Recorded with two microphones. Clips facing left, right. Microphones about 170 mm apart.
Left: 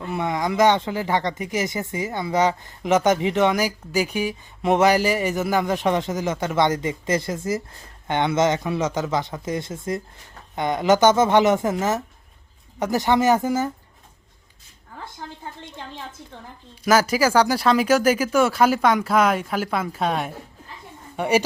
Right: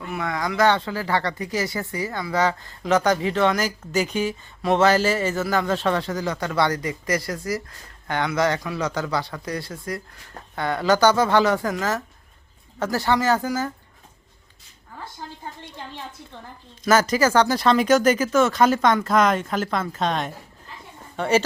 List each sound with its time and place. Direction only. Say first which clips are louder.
0.0 s speech: left 3 dB; 25° left (ahead or behind)
16.8 s speech: even; 10° left (ahead or behind)